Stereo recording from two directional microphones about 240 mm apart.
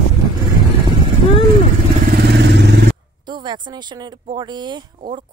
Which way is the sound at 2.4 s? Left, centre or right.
Right.